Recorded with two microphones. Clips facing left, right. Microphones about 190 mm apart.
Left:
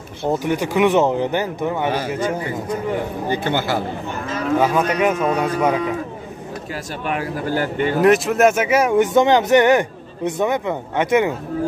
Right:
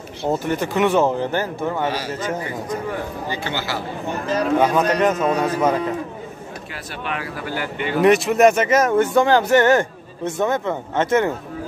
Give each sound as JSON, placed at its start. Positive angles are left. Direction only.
{"t": 0.2, "sound": "speech", "side_deg": 15}
{"t": 1.9, "sound": "a man's voice", "side_deg": 55}
{"t": 3.3, "sound": "speech", "side_deg": 55}
{"t": 4.6, "sound": "speech", "side_deg": 5}
{"t": 7.1, "sound": "speech", "side_deg": 45}
{"t": 8.0, "sound": "speech", "side_deg": 0}